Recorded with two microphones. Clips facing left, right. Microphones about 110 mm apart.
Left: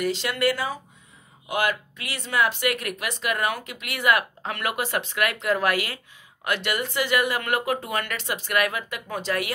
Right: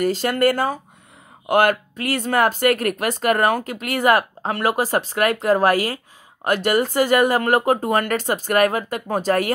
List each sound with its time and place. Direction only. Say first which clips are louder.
0.0 s speech: right 6 dB; 45° right (ahead or behind)